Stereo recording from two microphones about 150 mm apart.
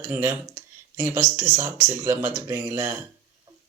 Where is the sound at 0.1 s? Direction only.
15° right (ahead or behind).